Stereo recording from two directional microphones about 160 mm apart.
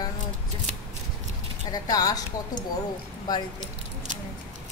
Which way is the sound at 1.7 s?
25° left (ahead or behind).